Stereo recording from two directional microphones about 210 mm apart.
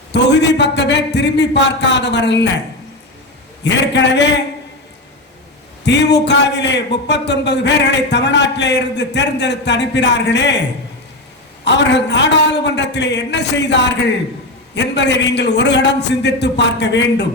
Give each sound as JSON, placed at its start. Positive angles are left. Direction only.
{"t": 0.1, "sound": "a man's voice", "side_deg": 55}
{"t": 3.6, "sound": "a man's voice", "side_deg": 55}
{"t": 5.8, "sound": "a man's voice", "side_deg": 55}
{"t": 11.6, "sound": "a man's voice", "side_deg": 55}